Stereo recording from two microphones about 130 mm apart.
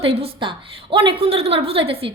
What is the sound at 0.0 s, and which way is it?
A woman's voice, 45° right (ahead or behind).